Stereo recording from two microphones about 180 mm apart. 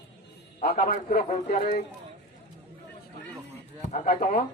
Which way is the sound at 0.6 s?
50° left (ahead or behind).